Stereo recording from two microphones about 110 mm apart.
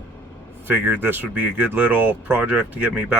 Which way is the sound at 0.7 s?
20° right (ahead or behind).